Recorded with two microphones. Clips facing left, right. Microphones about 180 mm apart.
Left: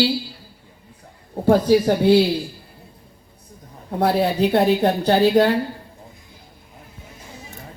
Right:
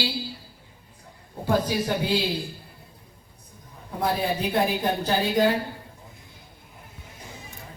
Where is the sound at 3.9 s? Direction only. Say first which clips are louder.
Left 7 dB; 70° left (ahead or behind).